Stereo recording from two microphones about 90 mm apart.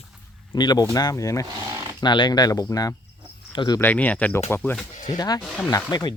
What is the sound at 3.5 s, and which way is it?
Speech, 65° left (ahead or behind).